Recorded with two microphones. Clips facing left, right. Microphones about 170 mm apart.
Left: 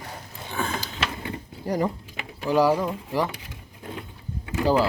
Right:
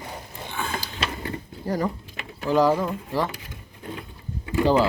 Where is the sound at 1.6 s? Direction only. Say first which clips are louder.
Left 1 dB; 20° left (ahead or behind).